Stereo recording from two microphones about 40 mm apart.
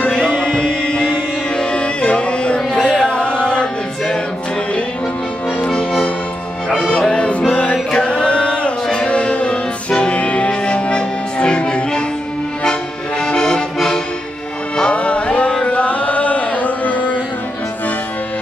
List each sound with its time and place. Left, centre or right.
0.0 s music: left
5.6 s music: left
13.2 s accordion: centre
14.8 s music: left
15.6 s chant: left